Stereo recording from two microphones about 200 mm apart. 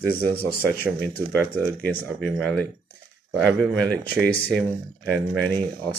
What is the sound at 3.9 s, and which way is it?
Speech, 55° right (ahead or behind).